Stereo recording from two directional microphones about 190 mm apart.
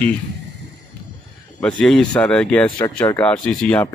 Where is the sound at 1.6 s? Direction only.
5° left (ahead or behind).